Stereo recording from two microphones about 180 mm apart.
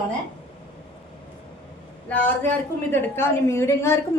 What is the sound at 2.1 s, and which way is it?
A woman's voice, 10° left (ahead or behind).